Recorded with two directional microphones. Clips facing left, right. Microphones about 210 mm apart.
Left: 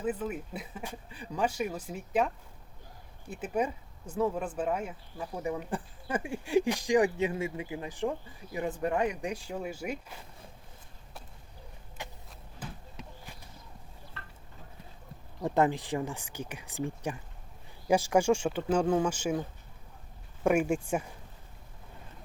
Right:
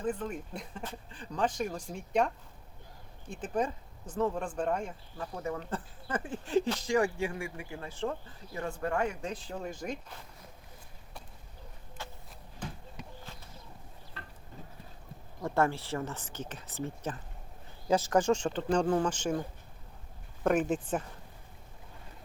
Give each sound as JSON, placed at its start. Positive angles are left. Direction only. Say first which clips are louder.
{"t": 0.0, "sound": "speech", "louder": "left 1 dB", "side_deg": 5}
{"t": 12.0, "sound": "a sound", "louder": "left 1 dB", "side_deg": 15}
{"t": 15.4, "sound": "speech", "louder": "left 2 dB", "side_deg": 15}
{"t": 20.4, "sound": "speech", "louder": "left 2 dB", "side_deg": 10}